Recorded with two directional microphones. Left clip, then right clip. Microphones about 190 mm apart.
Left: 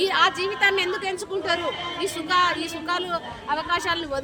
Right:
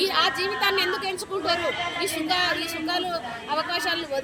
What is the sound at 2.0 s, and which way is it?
A woman's voice, centre (ahead or behind).